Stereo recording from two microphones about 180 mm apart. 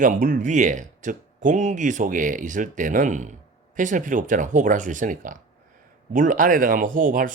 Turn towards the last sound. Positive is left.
turn(degrees=-50)  # may be behind; listen again after turning